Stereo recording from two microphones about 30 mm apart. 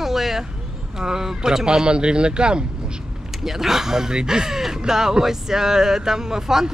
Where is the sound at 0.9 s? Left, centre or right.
Centre.